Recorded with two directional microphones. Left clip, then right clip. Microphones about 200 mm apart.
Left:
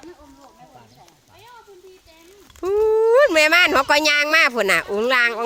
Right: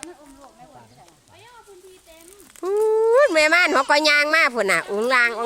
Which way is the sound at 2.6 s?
15° left (ahead or behind).